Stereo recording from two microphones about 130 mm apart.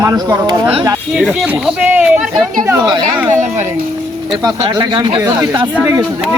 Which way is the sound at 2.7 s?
30° right (ahead or behind).